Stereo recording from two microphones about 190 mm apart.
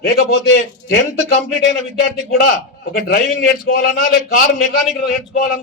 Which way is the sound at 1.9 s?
50° left (ahead or behind).